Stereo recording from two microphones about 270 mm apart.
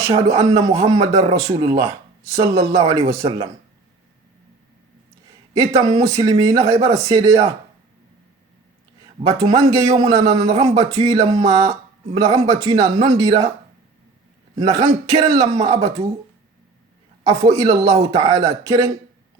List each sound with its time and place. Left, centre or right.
0.3 s speech: centre
5.5 s speech: centre
9.2 s speech: centre
14.6 s speech: centre
17.6 s speech: centre